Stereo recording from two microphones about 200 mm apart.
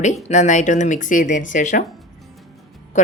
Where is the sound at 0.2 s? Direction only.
35° left (ahead or behind).